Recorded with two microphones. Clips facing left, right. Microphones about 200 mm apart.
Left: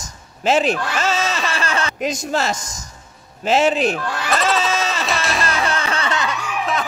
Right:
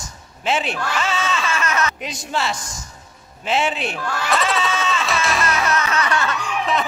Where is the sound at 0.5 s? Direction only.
40° left (ahead or behind).